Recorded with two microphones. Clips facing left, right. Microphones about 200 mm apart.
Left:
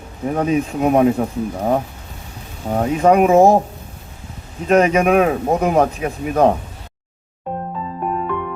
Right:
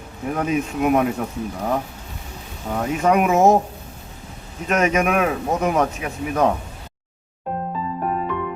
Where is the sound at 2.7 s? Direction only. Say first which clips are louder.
Left 5 dB; 30° left (ahead or behind).